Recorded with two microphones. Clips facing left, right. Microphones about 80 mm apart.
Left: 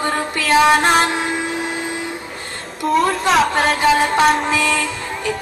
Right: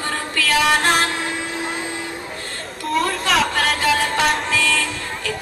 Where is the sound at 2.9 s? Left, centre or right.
Centre.